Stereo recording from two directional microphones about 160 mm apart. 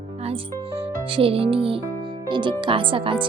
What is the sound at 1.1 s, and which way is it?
Speech, 35° right (ahead or behind).